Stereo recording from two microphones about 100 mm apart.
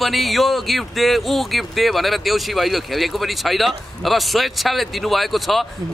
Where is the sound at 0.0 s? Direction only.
Centre (ahead or behind).